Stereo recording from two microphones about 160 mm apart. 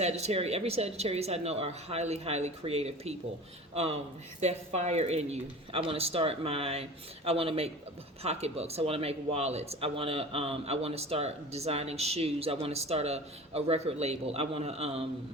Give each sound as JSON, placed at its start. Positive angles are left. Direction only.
{"t": 0.0, "sound": "a man's voice", "side_deg": -40}